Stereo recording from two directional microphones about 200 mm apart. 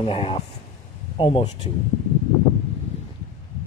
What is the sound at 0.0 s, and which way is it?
A man's voice, 25° left (ahead or behind).